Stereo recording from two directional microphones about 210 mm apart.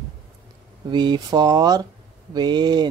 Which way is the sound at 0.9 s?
20° right (ahead or behind).